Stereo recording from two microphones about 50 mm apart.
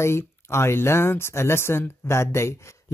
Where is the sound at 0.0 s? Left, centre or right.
Left.